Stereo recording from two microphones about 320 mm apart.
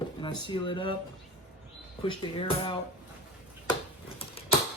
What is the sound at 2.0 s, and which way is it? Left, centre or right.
Speech, centre.